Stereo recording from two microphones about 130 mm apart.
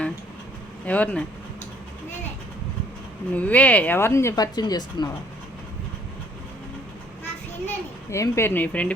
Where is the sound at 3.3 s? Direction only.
10° left (ahead or behind); by 5.0 s 30° left (ahead or behind).